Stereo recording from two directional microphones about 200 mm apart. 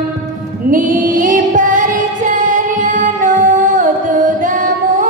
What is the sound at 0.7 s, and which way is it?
Music, 40° right (ahead or behind).